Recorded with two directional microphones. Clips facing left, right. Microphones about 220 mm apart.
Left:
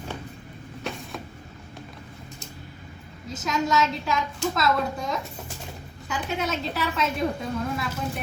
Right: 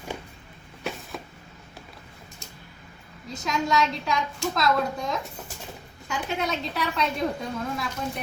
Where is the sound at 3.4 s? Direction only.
Centre (ahead or behind).